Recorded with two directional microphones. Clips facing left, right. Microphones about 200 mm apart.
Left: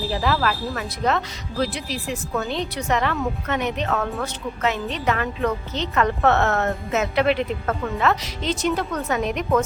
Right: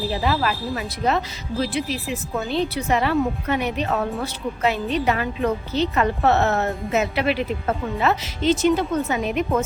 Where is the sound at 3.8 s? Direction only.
25° right (ahead or behind).